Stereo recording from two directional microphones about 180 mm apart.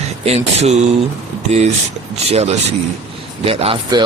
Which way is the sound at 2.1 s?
35° right (ahead or behind).